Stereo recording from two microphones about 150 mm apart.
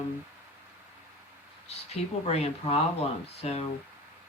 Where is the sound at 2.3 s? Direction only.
45° left (ahead or behind).